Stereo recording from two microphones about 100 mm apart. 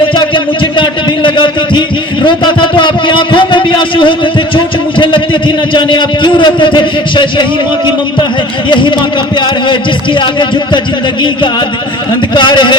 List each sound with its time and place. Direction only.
0.2 s a sound: 55° left (ahead or behind)
2.2 s a man's voice: 55° left (ahead or behind)
12.3 s a man's voice: 50° left (ahead or behind)